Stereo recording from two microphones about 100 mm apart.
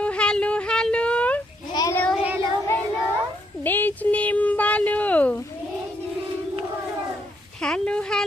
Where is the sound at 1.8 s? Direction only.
40° left (ahead or behind).